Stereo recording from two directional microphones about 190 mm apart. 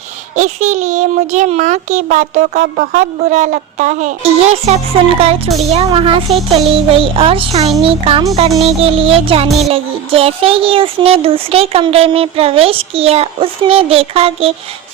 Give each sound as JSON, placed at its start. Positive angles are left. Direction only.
{"t": 0.3, "sound": "a child's voice", "side_deg": -35}
{"t": 5.6, "sound": "music", "side_deg": -30}
{"t": 9.6, "sound": "a child's voice", "side_deg": -30}